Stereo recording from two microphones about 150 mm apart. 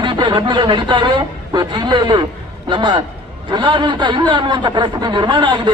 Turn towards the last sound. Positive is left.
turn(degrees=-30)  # may be behind; listen again after turning